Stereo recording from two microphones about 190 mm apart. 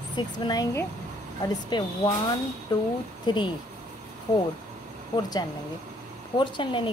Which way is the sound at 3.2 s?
25° left (ahead or behind).